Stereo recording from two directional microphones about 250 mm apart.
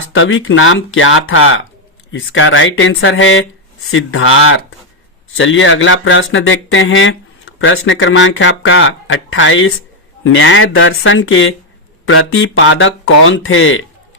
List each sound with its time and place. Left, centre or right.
0.1 s speech: left